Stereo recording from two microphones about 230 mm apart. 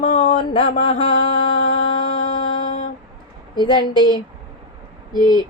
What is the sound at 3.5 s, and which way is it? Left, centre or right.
Mantra, centre.